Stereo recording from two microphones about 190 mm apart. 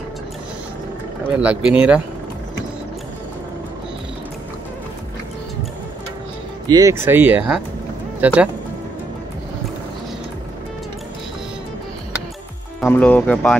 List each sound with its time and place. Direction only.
1.4 s speech: 5° right (ahead or behind)
6.7 s speech: 15° right (ahead or behind)
12.8 s speech: 5° left (ahead or behind)